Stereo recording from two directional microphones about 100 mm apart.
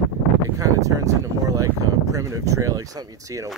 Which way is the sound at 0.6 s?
30° right (ahead or behind).